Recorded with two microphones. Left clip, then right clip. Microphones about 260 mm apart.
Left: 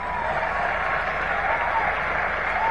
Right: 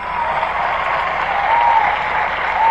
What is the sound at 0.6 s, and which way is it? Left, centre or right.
Applause, right.